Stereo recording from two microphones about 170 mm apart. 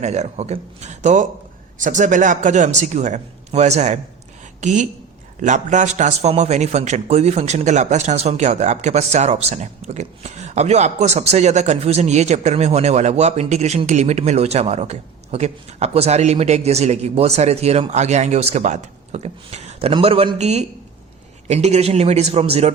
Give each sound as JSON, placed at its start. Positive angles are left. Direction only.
{"t": 0.0, "sound": "a man's voice", "side_deg": -40}